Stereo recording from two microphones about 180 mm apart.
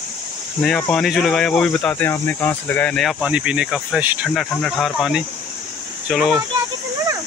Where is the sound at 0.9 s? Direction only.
Centre (ahead or behind).